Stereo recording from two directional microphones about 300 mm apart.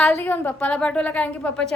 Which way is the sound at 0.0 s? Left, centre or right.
Centre.